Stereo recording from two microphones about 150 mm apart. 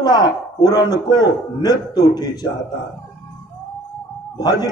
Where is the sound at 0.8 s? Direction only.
20° right (ahead or behind).